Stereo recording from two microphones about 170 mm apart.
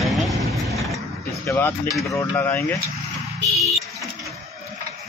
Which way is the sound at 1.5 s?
10° left (ahead or behind).